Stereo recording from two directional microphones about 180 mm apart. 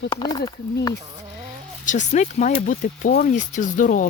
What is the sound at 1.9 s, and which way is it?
Speech, 40° left (ahead or behind).